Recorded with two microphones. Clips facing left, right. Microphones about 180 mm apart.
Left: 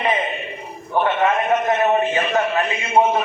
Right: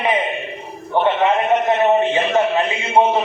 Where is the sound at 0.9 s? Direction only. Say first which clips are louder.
Right 3 dB; 25° right (ahead or behind).